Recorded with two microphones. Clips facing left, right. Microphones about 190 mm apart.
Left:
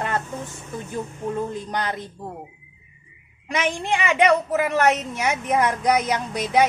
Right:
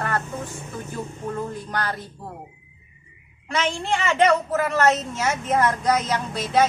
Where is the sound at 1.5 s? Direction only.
20° left (ahead or behind).